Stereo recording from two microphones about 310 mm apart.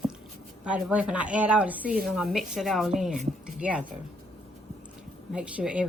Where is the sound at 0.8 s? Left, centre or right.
Centre.